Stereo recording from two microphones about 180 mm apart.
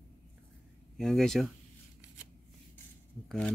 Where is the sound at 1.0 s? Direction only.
Centre (ahead or behind).